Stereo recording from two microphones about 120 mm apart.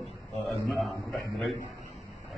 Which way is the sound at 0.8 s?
Centre (ahead or behind).